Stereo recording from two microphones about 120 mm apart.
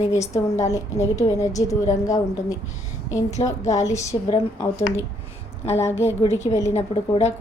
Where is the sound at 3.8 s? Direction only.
25° left (ahead or behind).